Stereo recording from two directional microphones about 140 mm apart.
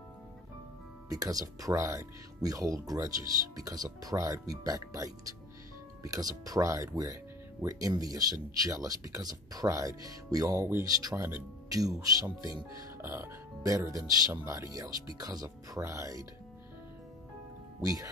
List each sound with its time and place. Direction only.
1.0 s speech: 25° right (ahead or behind)
17.8 s speech: 25° right (ahead or behind)